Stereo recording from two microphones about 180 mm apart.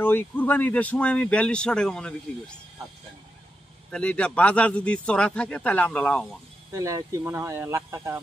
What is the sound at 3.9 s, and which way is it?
A man's voice, 5° left (ahead or behind).